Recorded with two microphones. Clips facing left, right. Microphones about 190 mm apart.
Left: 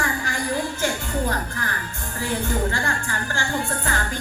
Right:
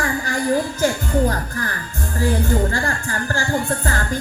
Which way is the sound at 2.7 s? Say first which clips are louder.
Right 3 dB; 40° right (ahead or behind).